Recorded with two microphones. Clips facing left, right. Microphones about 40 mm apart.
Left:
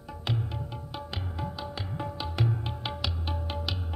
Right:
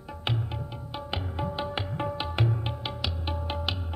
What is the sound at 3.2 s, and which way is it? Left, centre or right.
Music, right.